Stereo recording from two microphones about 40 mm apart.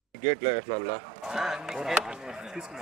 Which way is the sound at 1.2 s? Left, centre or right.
Centre.